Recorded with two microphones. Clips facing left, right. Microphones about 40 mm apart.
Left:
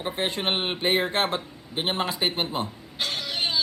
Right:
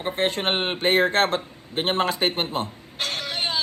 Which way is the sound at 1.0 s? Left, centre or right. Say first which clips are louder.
Right 5 dB; centre.